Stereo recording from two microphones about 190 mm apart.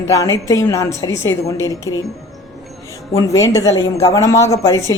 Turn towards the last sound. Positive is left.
turn(degrees=15)  # may be behind; listen again after turning